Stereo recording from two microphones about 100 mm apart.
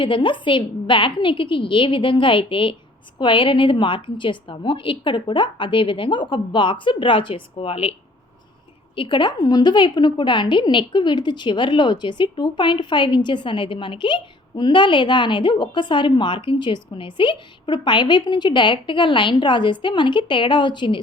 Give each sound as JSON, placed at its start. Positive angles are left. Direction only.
{"t": 0.0, "sound": "a woman's voice", "side_deg": 55}
{"t": 9.0, "sound": "a woman's voice", "side_deg": 55}
{"t": 9.4, "sound": "a woman's voice", "side_deg": 40}